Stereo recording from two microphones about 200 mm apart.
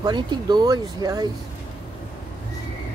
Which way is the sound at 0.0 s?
20° right (ahead or behind).